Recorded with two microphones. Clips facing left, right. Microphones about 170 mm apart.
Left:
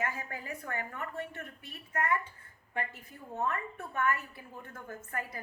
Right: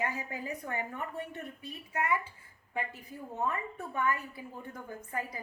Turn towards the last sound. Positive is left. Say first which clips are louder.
# right 2 dB
turn(degrees=-15)  # may be behind; listen again after turning